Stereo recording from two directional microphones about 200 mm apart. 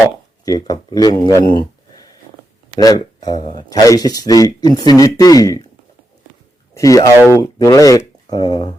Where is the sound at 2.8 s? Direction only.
20° left (ahead or behind).